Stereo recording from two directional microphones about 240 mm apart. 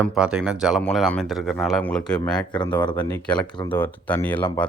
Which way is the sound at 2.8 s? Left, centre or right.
Centre.